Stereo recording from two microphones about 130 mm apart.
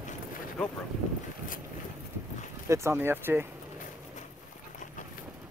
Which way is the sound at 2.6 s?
20° right (ahead or behind).